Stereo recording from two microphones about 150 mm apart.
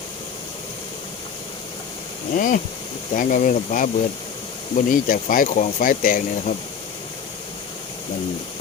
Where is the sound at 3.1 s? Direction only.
60° left (ahead or behind).